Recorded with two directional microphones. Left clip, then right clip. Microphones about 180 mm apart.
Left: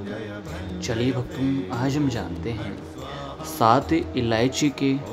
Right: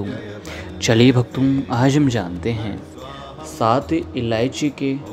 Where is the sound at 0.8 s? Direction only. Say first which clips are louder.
Right 11 dB; 45° right (ahead or behind).